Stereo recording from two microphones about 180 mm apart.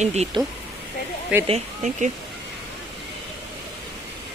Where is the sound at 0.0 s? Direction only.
35° right (ahead or behind).